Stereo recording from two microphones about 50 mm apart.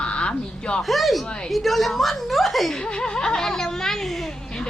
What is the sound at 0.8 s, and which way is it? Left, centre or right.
Speech, centre.